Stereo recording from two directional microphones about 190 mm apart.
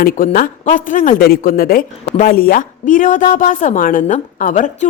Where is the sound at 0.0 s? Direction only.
50° left (ahead or behind).